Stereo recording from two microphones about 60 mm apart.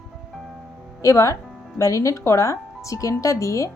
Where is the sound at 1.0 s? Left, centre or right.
Left.